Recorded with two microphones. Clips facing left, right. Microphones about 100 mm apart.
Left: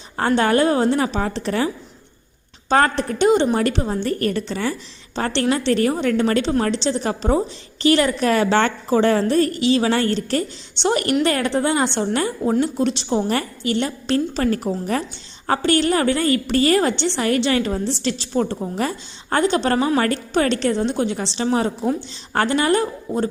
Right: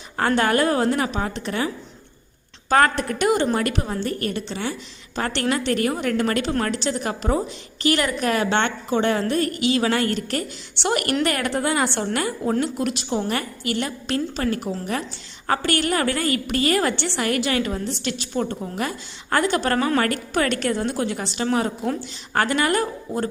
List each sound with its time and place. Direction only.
0.2 s a woman's voice: 25° left (ahead or behind)
4.2 s a woman's voice: 40° left (ahead or behind)
15.4 s a woman's voice: 25° left (ahead or behind)
16.9 s a woman's voice: 20° left (ahead or behind)